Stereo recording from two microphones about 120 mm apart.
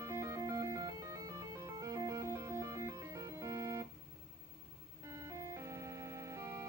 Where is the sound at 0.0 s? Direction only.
25° right (ahead or behind).